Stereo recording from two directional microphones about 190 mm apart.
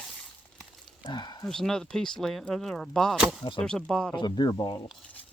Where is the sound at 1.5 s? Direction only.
Centre (ahead or behind).